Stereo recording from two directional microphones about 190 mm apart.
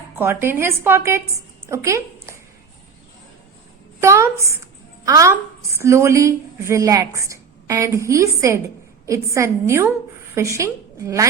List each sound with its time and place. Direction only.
0.2 s a woman's voice: 10° right (ahead or behind)
4.0 s a woman's voice: 15° right (ahead or behind)